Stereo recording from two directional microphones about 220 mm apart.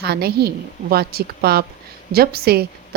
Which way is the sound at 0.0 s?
45° right (ahead or behind).